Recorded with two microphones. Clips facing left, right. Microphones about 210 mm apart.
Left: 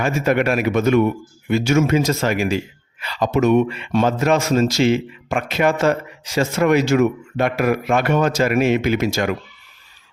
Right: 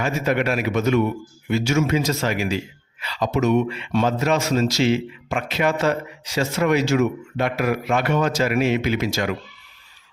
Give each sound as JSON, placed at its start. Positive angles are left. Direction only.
{"t": 0.0, "sound": "speech", "side_deg": 50}